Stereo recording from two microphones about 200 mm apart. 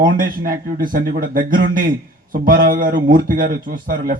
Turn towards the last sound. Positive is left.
turn(degrees=-45)  # may be behind; listen again after turning